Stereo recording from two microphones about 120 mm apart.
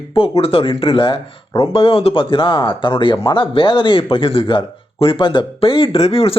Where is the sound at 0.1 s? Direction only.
50° left (ahead or behind).